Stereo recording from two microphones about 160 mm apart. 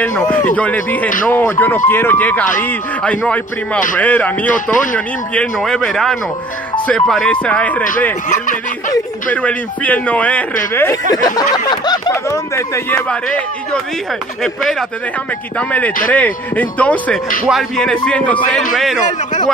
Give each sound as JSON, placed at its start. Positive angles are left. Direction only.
{"t": 0.3, "sound": "a man's voice", "side_deg": 10}
{"t": 9.3, "sound": "a man's voice", "side_deg": 10}
{"t": 14.4, "sound": "speech", "side_deg": 0}
{"t": 16.1, "sound": "a man's voice", "side_deg": 10}